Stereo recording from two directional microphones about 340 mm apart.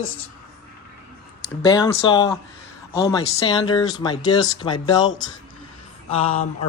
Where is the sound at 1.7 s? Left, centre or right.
Centre.